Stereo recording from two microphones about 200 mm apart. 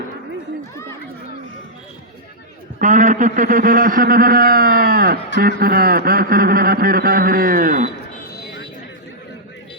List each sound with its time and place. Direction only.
2.7 s speech: 40° right (ahead or behind)